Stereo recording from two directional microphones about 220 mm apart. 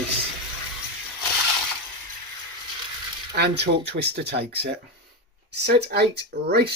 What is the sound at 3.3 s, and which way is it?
Speech, 50° right (ahead or behind).